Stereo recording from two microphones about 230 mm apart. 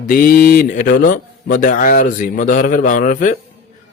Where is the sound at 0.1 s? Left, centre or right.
Left.